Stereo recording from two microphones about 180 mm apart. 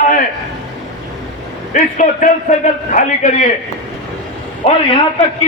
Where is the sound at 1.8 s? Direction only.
45° left (ahead or behind).